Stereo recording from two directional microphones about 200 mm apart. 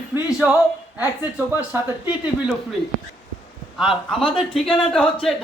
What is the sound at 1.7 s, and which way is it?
Speech, 10° right (ahead or behind).